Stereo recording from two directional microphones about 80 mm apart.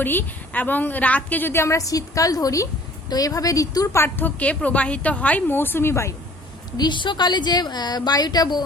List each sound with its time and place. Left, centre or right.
0.0 s a woman's voice: left
4.0 s a woman's voice: left
6.7 s a woman's voice: left